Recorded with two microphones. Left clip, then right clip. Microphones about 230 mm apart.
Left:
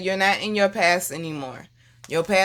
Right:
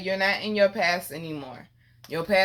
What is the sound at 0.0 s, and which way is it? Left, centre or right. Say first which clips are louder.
Speech: left 4 dB; left.